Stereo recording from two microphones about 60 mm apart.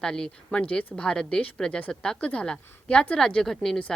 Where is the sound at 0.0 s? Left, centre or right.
Centre.